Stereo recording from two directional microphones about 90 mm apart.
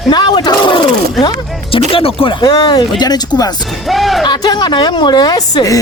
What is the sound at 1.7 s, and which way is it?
Speech, 90° left.